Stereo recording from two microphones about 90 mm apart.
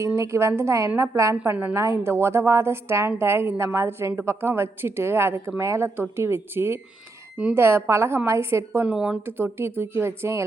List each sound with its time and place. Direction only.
0.2 s a woman's voice: 30° right (ahead or behind)
1.5 s speech: 15° right (ahead or behind)
1.7 s a woman's voice: 35° right (ahead or behind)
8.8 s speech: 10° right (ahead or behind)
9.2 s a woman's voice: 25° right (ahead or behind)